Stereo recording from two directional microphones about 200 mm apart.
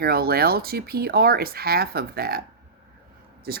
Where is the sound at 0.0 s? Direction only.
50° right (ahead or behind).